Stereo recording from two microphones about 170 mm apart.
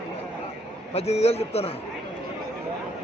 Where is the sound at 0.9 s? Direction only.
35° left (ahead or behind).